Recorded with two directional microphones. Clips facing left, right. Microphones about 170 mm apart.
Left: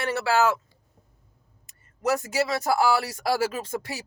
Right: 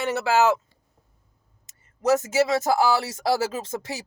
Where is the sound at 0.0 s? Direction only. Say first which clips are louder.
Right 2 dB; 20° right (ahead or behind).